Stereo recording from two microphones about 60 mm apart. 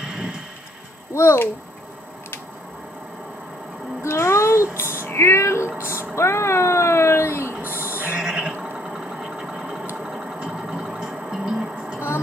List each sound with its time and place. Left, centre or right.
0.0 s music: centre
1.1 s a child's voice: left
4.0 s a sound: left
5.0 s female singing: left
5.9 s cat: left
7.8 s a sound: right
8.2 s vehicle: centre
9.9 s music: centre